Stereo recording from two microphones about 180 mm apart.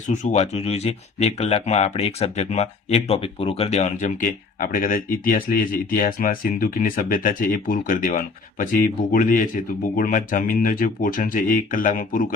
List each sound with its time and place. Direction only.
0.1 s speech: 40° left (ahead or behind)